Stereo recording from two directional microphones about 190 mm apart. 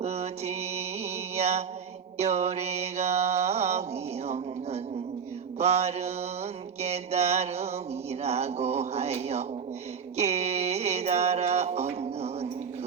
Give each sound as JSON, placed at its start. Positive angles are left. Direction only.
{"t": 0.0, "sound": "mantra", "side_deg": -35}
{"t": 5.5, "sound": "mantra", "side_deg": -35}
{"t": 8.2, "sound": "a sound", "side_deg": -35}
{"t": 10.2, "sound": "mantra", "side_deg": -35}